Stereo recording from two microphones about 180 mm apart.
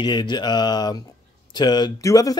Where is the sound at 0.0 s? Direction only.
25° left (ahead or behind).